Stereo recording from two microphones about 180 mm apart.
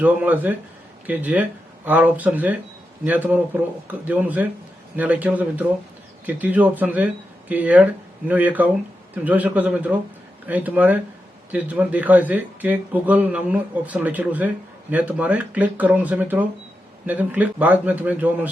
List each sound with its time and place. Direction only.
0.0 s speech: 10° right (ahead or behind)